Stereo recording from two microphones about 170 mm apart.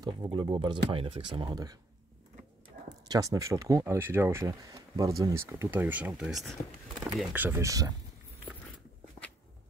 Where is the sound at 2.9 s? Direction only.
20° right (ahead or behind).